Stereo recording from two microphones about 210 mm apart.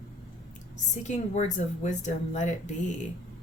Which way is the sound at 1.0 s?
35° left (ahead or behind).